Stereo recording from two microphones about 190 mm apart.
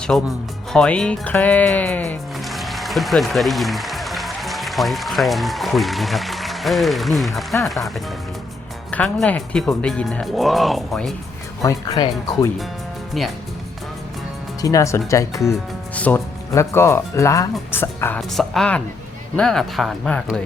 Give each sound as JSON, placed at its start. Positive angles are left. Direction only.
{"t": 0.1, "sound": "speech", "side_deg": 0}
{"t": 11.6, "sound": "speech", "side_deg": 20}
{"t": 13.2, "sound": "speech", "side_deg": 0}
{"t": 14.6, "sound": "speech", "side_deg": 15}
{"t": 18.2, "sound": "speech", "side_deg": 0}